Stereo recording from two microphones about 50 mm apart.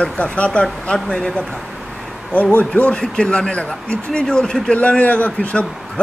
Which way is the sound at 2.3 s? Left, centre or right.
Left.